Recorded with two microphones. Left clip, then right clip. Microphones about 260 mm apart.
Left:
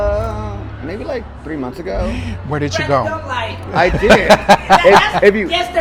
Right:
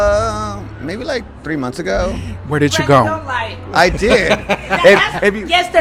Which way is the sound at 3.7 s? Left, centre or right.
Right.